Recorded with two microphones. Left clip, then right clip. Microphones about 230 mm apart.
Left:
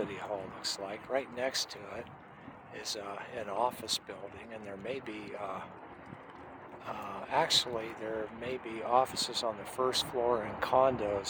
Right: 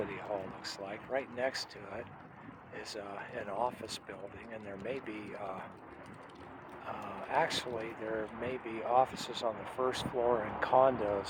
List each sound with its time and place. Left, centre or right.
0.0 s speech: left
6.8 s speech: centre